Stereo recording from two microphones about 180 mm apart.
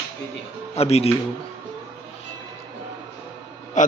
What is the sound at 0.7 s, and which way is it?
Speech, 35° left (ahead or behind).